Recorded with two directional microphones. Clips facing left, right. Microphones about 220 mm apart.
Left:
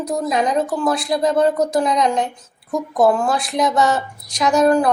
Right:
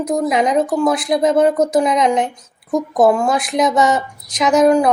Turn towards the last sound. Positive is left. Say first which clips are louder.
# right 2 dB
turn(degrees=-15)  # may be behind; listen again after turning